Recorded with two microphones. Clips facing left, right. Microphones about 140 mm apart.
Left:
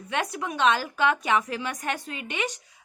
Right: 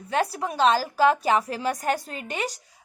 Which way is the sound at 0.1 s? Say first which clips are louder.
Right 4 dB; 35° right (ahead or behind).